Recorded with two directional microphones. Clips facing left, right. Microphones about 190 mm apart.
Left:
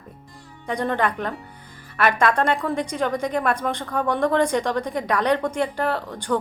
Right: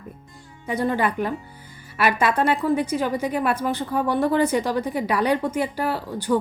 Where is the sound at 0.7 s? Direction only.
5° right (ahead or behind).